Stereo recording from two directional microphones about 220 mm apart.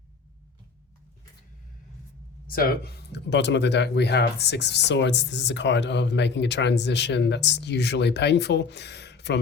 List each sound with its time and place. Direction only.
2.5 s speech: 40° left (ahead or behind)